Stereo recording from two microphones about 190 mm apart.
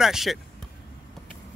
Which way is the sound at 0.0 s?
Centre (ahead or behind).